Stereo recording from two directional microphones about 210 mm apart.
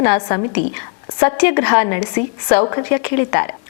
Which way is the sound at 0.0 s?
15° left (ahead or behind).